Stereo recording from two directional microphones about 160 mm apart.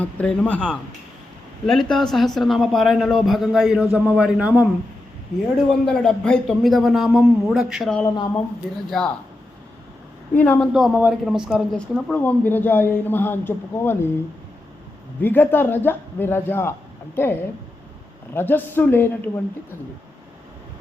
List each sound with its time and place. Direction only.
0.0 s a man's voice: 10° left (ahead or behind); by 4.6 s 10° right (ahead or behind)
5.8 s a man's voice: 5° left (ahead or behind)
8.0 s speech: 25° left (ahead or behind)
8.9 s a man's voice: 5° left (ahead or behind)
10.3 s speech: 10° left (ahead or behind)
10.8 s speech: 5° right (ahead or behind); by 14.1 s 15° left (ahead or behind)
15.2 s speech: 10° left (ahead or behind)
18.3 s speech: 15° left (ahead or behind)